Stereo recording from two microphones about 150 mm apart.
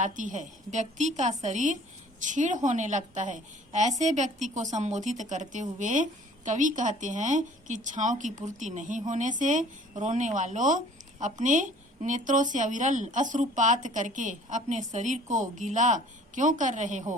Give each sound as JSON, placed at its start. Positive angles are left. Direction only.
{"t": 0.0, "sound": "a woman's voice", "side_deg": -55}